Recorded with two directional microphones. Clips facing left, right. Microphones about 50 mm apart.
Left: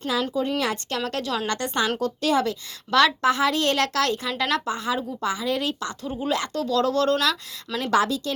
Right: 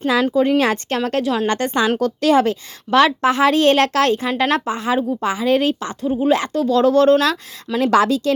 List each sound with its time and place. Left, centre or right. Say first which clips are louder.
0.1 s a woman's voice: right 8 dB; right
0.5 s a woman's voice: right 8 dB; right
2.0 s speech: right 7 dB; right
2.4 s a woman's voice: right 7 dB; right
7.8 s speech: right 7 dB; right